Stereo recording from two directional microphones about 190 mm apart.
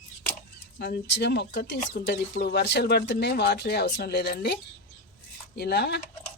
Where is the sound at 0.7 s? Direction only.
60° left (ahead or behind).